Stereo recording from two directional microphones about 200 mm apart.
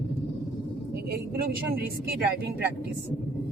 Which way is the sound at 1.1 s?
50° right (ahead or behind).